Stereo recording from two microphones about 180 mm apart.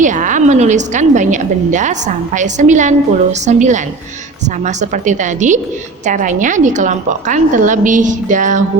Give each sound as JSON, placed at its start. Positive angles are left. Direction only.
{"t": 0.0, "sound": "a woman's voice", "side_deg": -45}